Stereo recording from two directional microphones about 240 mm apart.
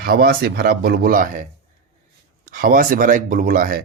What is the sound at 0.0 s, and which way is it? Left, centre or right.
Speech, right.